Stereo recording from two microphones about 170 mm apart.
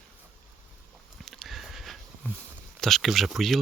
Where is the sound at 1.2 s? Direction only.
Centre (ahead or behind).